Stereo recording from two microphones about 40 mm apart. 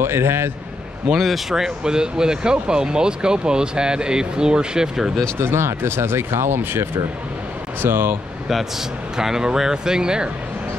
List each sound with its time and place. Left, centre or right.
0.0 s a man's voice: right
1.1 s a man's voice: centre
1.5 s speech: centre
5.4 s speech: right
9.1 s speech: centre